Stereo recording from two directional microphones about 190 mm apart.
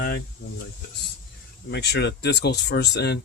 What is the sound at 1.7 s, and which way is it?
Speech, 60° left (ahead or behind).